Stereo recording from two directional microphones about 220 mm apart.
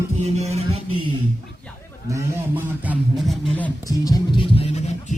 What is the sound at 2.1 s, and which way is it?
Speech, 10° right (ahead or behind).